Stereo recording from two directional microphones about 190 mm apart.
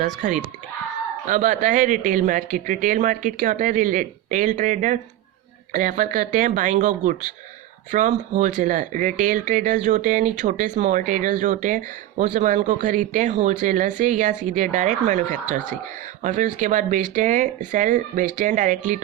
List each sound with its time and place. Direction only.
0.0 s speech: 40° right (ahead or behind)